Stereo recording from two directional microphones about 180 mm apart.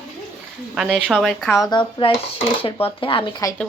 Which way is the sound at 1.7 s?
25° left (ahead or behind).